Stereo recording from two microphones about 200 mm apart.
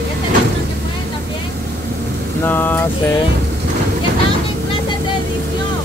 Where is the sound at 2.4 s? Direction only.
10° left (ahead or behind).